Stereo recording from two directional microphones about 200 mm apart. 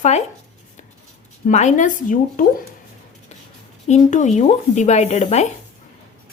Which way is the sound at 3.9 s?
35° left (ahead or behind).